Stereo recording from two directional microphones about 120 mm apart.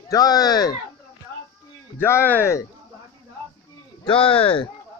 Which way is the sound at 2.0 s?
20° left (ahead or behind).